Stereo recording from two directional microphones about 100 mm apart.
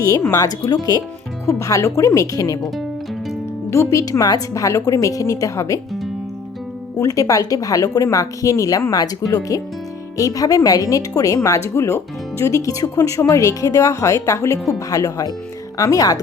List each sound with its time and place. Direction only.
0.0 s speech: 35° left (ahead or behind)
3.7 s speech: 30° left (ahead or behind)
6.9 s speech: 35° left (ahead or behind)